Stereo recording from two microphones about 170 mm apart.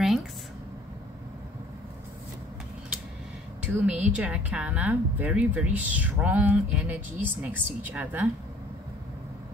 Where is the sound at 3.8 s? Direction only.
5° right (ahead or behind).